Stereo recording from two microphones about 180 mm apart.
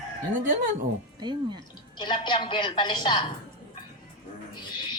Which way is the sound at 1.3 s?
25° right (ahead or behind).